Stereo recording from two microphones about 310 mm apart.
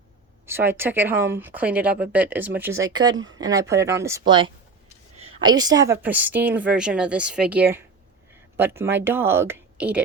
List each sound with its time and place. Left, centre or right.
0.4 s a woman's voice: centre